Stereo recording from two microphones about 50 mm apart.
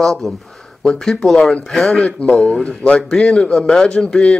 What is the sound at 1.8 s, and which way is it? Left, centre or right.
Speech, left.